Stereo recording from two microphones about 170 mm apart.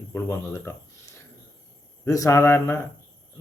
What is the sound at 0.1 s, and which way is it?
Speech, 15° left (ahead or behind).